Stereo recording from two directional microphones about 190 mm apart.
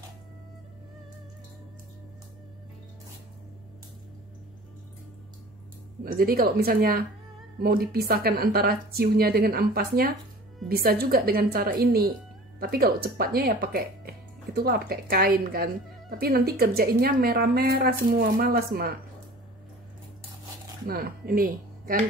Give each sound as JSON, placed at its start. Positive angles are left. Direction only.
{"t": 6.0, "sound": "speech", "side_deg": -50}
{"t": 20.8, "sound": "speech", "side_deg": -50}